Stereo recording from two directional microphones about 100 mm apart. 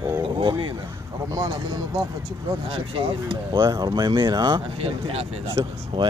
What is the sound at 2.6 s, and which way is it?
Speech, 65° right (ahead or behind).